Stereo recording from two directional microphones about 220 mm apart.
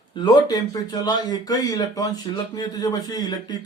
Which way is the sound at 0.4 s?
20° left (ahead or behind).